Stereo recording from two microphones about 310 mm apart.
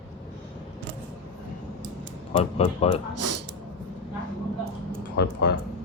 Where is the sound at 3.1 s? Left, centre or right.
Right.